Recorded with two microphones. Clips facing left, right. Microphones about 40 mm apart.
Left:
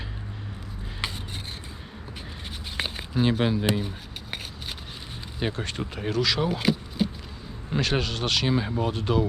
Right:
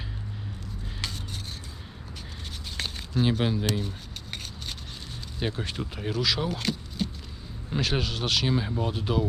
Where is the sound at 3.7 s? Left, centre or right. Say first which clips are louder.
Left 3 dB; centre.